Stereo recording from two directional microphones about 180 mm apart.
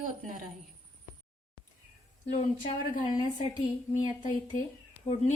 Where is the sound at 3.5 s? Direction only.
20° left (ahead or behind).